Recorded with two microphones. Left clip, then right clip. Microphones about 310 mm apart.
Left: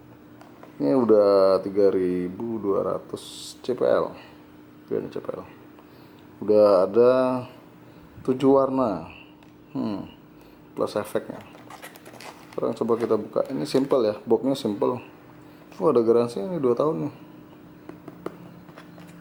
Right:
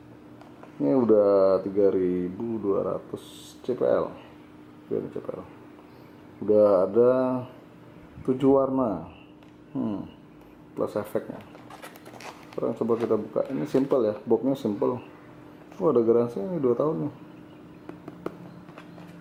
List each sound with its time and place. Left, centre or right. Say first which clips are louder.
0.8 s speech: left 2 dB; centre
9.7 s a sound: left 1 dB; right
10.8 s writing: left 2 dB; centre
12.5 s speech: left 2 dB; centre